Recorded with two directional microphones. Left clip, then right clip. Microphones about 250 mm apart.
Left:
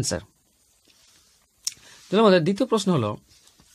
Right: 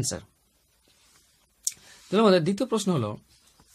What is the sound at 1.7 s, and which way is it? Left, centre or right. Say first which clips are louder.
Speech: left 2 dB; centre.